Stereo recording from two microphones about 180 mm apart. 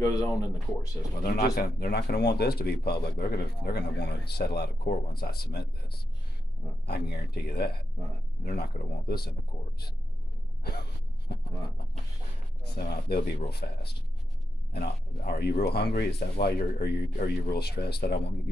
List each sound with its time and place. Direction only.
0.0 s speech: 20° left (ahead or behind)
1.2 s speech: 60° left (ahead or behind)
6.9 s speech: 65° left (ahead or behind)
10.6 s gasp: 60° left (ahead or behind)
12.6 s speech: 60° left (ahead or behind)